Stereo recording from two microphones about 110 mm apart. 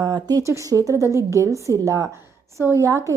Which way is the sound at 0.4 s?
30° right (ahead or behind).